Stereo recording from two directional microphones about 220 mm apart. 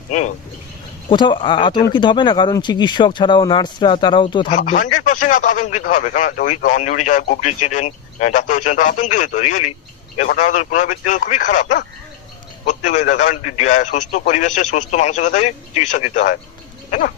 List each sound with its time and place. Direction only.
1.1 s speech: 20° left (ahead or behind)
4.6 s speech: 35° left (ahead or behind)